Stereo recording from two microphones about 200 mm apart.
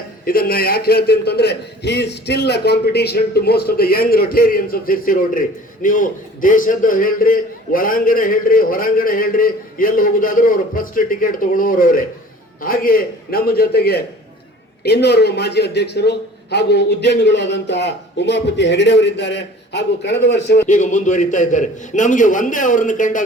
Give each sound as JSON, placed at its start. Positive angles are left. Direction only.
{"t": 0.3, "sound": "a man's voice", "side_deg": 45}
{"t": 20.7, "sound": "a man's voice", "side_deg": 40}